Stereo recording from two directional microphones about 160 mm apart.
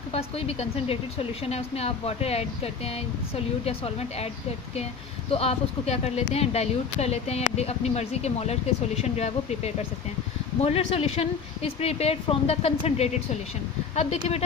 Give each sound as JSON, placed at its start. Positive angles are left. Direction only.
{"t": 0.1, "sound": "speech", "side_deg": 40}
{"t": 5.3, "sound": "speech", "side_deg": 40}